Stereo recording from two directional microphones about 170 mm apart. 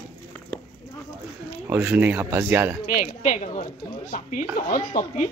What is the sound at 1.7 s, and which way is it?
A man's voice, 10° right (ahead or behind).